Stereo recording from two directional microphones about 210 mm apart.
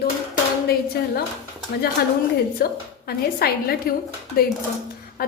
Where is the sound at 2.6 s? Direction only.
45° left (ahead or behind).